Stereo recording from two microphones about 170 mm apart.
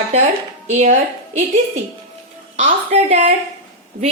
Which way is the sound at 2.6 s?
40° right (ahead or behind).